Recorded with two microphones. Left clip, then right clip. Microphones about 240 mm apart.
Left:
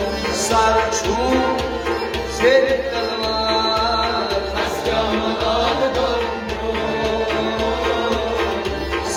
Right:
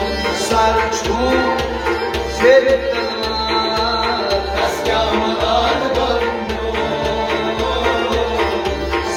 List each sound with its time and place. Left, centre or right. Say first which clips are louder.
2.4 s music: right 4 dB; left